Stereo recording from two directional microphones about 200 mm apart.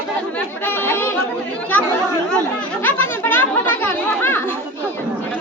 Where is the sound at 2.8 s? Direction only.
10° left (ahead or behind).